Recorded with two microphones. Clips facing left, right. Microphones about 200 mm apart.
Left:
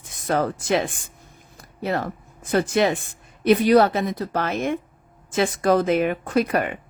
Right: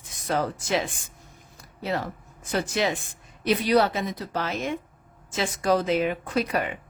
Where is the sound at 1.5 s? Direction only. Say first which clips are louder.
Left 4 dB; 55° left (ahead or behind).